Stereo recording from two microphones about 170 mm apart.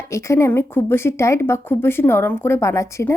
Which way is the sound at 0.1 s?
15° left (ahead or behind).